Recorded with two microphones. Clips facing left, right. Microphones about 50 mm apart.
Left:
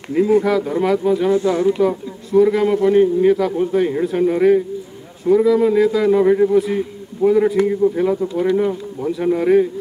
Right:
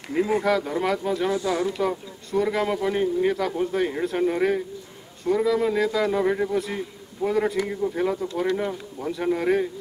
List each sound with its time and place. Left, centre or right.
0.4 s speech: centre
1.5 s speech: left
1.8 s speech: centre